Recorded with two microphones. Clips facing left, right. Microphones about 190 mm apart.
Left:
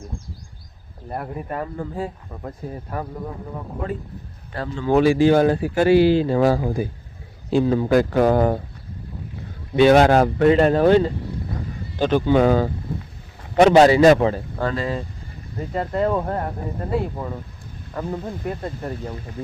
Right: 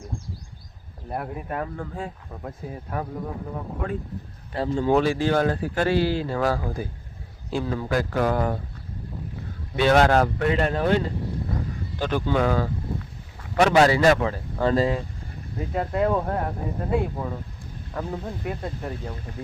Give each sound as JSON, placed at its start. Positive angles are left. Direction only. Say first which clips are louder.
{"t": 1.1, "sound": "speech", "louder": "left 2 dB", "side_deg": 0}
{"t": 4.5, "sound": "speech", "louder": "right 4 dB", "side_deg": -30}
{"t": 4.9, "sound": "speech", "louder": "left 7 dB", "side_deg": 10}
{"t": 9.7, "sound": "speech", "louder": "left 5 dB", "side_deg": 15}
{"t": 10.3, "sound": "speech", "louder": "left 8 dB", "side_deg": 35}
{"t": 15.5, "sound": "speech", "louder": "left 2 dB", "side_deg": -5}